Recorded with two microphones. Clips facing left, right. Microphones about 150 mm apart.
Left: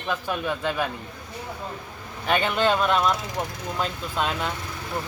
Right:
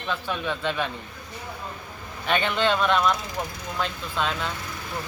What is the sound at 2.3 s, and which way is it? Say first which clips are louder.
Speech: left 1 dB; 10° left (ahead or behind).